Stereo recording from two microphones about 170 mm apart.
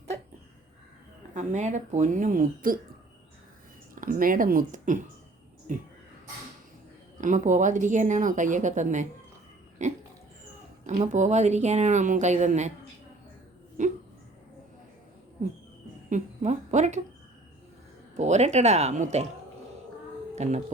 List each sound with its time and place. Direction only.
1.3 s speech: 45° right (ahead or behind)
3.9 s speech: 55° right (ahead or behind)
7.2 s speech: 50° right (ahead or behind)
13.8 s a sound: 45° right (ahead or behind)
16.0 s a woman's voice: 45° right (ahead or behind)
18.2 s speech: 40° right (ahead or behind)
20.3 s speech: 40° right (ahead or behind)